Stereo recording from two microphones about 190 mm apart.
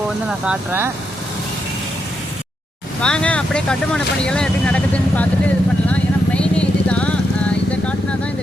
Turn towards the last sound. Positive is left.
turn(degrees=5)  # may be behind; listen again after turning